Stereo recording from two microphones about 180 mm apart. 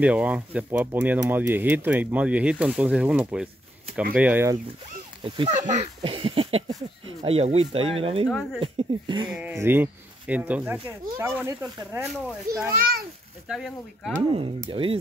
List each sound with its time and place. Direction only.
0.0 s speech: 10° right (ahead or behind)
5.2 s a child's voice: 30° right (ahead or behind)
5.5 s speech: 40° right (ahead or behind); by 9.3 s 25° right (ahead or behind)
9.3 s speech: 5° right (ahead or behind)
12.7 s a child's voice: 55° right (ahead or behind)
13.5 s speech: centre (ahead or behind)
14.3 s speech: 30° right (ahead or behind)